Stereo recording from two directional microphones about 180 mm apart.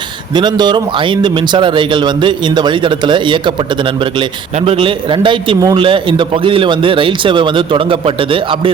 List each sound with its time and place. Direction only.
0.3 s speech: 25° right (ahead or behind)